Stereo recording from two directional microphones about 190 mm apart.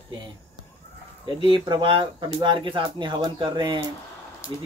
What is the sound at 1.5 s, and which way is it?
Speech, 25° right (ahead or behind).